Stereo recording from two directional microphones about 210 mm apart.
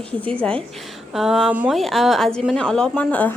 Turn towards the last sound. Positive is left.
turn(degrees=10)  # may be behind; listen again after turning